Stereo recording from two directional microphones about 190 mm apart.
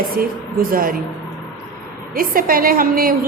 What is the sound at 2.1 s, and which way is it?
A woman's voice, 50° right (ahead or behind).